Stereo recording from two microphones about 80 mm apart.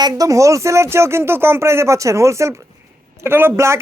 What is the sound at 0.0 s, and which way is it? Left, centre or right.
Speech, right.